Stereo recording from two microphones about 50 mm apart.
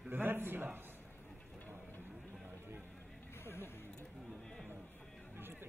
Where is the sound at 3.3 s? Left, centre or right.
Left.